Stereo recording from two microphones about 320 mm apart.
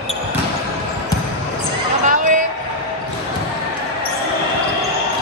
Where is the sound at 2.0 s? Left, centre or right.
Right.